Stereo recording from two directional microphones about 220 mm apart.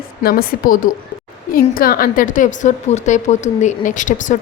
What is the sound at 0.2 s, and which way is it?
A woman's voice, 45° left (ahead or behind).